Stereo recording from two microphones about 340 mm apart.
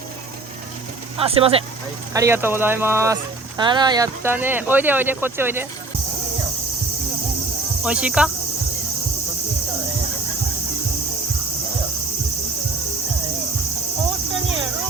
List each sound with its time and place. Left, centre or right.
1.1 s speech: centre
7.9 s cricket: centre